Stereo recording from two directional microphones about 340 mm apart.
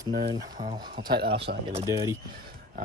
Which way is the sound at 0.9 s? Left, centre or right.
Right.